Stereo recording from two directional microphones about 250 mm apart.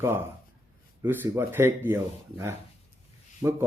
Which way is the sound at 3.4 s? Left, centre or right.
Centre.